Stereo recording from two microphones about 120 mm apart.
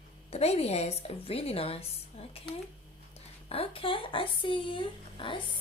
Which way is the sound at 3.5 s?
50° left (ahead or behind).